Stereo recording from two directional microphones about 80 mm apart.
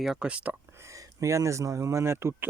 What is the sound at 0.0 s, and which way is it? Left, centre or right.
Speech, centre.